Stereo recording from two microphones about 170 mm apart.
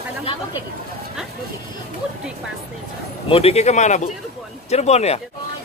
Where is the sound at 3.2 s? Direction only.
35° left (ahead or behind).